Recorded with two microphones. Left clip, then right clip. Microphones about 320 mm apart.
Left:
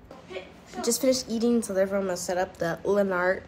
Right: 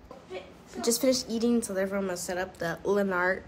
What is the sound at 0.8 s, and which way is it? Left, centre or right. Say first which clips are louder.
A woman's voice: left 1 dB; centre.